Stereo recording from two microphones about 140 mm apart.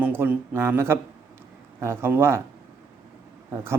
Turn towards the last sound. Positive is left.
turn(degrees=-20)  # may be behind; listen again after turning